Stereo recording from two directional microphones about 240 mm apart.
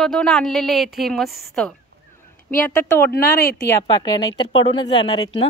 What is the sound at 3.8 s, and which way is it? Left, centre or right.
Speech, centre.